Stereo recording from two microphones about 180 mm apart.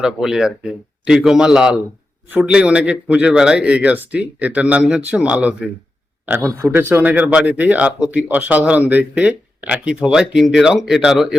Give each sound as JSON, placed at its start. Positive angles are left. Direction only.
{"t": 0.0, "sound": "a man's voice", "side_deg": 0}